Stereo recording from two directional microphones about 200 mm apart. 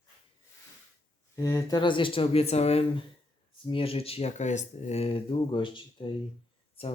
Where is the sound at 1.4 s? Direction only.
20° left (ahead or behind).